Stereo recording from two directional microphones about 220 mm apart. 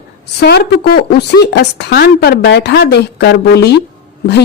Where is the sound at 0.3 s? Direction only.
45° left (ahead or behind).